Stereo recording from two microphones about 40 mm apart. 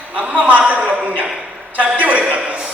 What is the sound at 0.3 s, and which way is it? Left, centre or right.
Speech, right.